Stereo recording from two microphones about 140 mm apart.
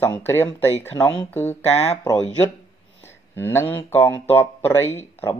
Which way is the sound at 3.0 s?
15° left (ahead or behind).